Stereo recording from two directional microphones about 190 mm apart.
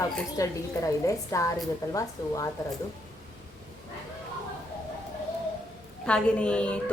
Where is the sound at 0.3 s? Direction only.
15° left (ahead or behind).